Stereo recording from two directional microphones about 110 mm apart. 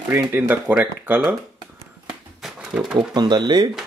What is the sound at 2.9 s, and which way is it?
Speech, 40° right (ahead or behind).